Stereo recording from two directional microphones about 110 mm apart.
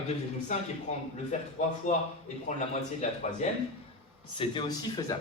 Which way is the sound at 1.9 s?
90° left.